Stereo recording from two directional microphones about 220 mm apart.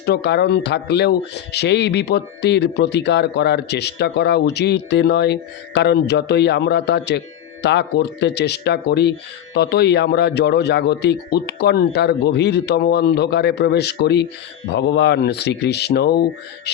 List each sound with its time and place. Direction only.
0.0 s speech: 50° left (ahead or behind)
16.7 s music: 50° left (ahead or behind)